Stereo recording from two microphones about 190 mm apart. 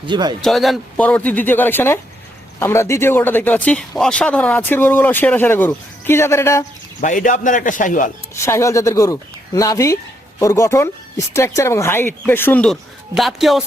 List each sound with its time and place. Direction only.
0.0 s speech: 25° right (ahead or behind)
0.4 s speech: centre (ahead or behind)
7.0 s a man's voice: 40° left (ahead or behind)
8.4 s speech: 15° left (ahead or behind); by 13.7 s centre (ahead or behind)